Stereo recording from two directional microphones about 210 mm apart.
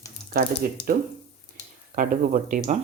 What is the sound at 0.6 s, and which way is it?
Speech, 40° right (ahead or behind).